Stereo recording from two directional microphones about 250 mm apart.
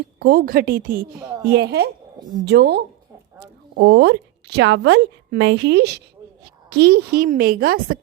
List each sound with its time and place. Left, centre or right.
0.2 s a woman's voice: right